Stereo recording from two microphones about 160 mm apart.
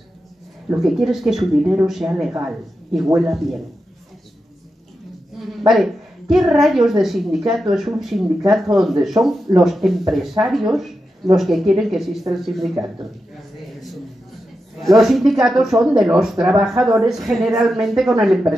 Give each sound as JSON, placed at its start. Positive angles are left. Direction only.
{"t": 0.7, "sound": "a woman's voice", "side_deg": 0}
{"t": 5.7, "sound": "a woman's voice", "side_deg": 0}
{"t": 14.8, "sound": "a woman's voice", "side_deg": 0}